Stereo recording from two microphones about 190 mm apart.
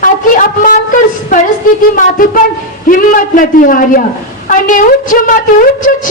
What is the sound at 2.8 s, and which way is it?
A man's voice, 45° left (ahead or behind).